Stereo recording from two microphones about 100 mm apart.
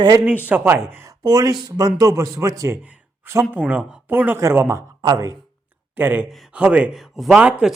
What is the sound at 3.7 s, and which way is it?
A woman's voice, 15° right (ahead or behind).